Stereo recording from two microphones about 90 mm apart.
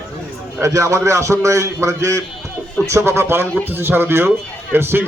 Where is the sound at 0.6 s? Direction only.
35° right (ahead or behind).